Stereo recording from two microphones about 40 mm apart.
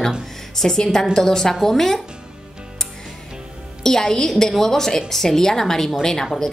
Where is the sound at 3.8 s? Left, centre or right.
Centre.